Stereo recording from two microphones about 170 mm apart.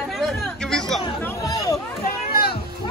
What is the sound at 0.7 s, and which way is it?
Chatter, 5° left (ahead or behind).